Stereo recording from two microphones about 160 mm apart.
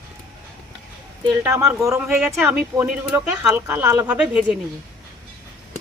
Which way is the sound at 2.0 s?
5° right (ahead or behind).